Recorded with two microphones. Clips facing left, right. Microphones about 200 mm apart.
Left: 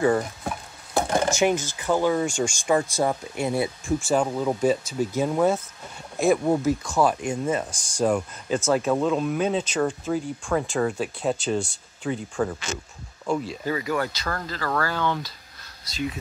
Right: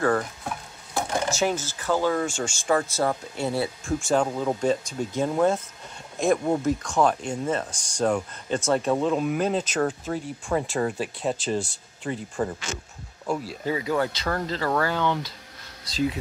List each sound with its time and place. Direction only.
1.3 s speech: 15° left (ahead or behind); by 13.6 s 5° right (ahead or behind)
13.7 s speech: 20° right (ahead or behind)